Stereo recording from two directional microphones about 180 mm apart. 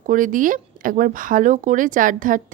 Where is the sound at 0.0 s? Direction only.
45° right (ahead or behind).